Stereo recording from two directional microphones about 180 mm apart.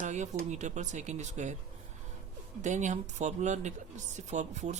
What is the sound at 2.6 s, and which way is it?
Speech, 40° right (ahead or behind).